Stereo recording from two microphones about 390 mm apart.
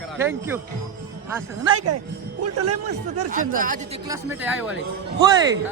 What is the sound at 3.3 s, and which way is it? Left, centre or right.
Speech, right.